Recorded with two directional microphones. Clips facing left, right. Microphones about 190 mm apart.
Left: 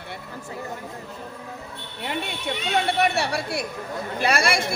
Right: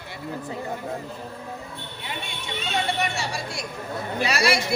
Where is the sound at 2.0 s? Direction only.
60° left (ahead or behind).